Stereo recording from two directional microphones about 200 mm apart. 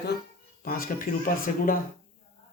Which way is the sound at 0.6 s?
45° left (ahead or behind).